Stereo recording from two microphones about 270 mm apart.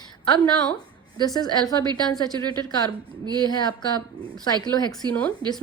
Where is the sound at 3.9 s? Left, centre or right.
Centre.